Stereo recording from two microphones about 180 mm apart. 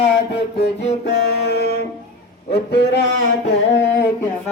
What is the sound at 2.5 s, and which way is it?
Speech, 65° left (ahead or behind).